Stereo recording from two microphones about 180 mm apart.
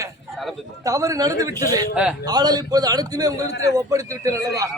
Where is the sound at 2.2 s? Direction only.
20° right (ahead or behind).